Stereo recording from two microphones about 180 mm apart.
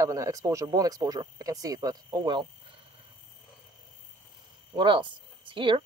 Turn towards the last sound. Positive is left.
turn(degrees=-30)  # may be behind; listen again after turning